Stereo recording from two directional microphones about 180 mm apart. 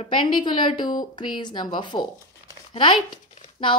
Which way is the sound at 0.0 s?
25° left (ahead or behind).